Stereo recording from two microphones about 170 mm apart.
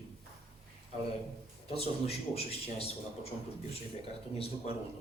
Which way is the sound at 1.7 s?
35° left (ahead or behind).